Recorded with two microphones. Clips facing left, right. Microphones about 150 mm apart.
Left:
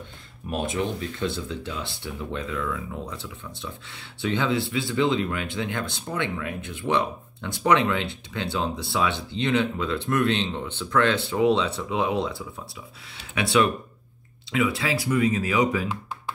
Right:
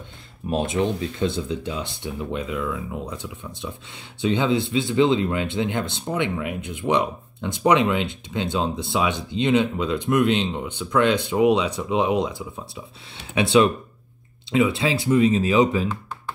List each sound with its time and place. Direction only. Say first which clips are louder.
0.5 s speech: right 4 dB; 25° right (ahead or behind)